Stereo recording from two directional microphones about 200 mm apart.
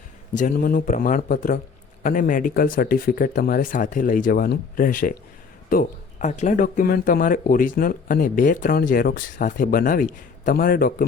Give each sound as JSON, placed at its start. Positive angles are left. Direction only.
{"t": 0.3, "sound": "speech", "side_deg": 45}